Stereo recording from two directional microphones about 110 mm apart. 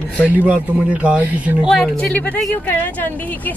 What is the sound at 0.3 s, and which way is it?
Speech, 15° right (ahead or behind).